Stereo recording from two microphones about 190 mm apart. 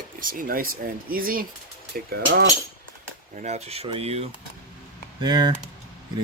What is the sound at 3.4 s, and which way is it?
Speech, 35° right (ahead or behind).